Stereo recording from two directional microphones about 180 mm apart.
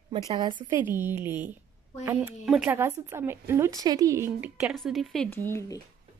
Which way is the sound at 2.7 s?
15° right (ahead or behind).